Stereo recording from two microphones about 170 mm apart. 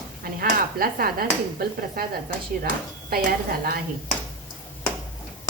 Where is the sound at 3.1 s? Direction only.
65° right (ahead or behind).